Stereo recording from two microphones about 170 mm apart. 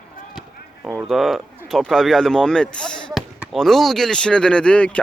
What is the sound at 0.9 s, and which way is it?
Speech, centre (ahead or behind).